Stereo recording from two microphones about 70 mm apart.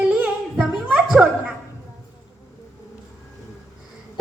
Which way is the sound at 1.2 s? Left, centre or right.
Centre.